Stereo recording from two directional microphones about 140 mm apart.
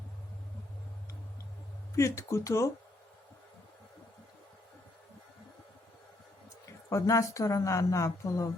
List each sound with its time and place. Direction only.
2.0 s a woman's voice: 20° left (ahead or behind)
6.9 s a woman's voice: 20° left (ahead or behind)